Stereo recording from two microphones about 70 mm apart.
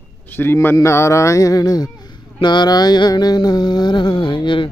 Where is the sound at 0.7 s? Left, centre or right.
Left.